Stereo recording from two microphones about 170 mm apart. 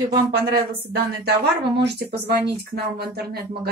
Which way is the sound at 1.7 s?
80° right.